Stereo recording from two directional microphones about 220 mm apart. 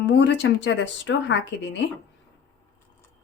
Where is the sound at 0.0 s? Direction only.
50° left (ahead or behind).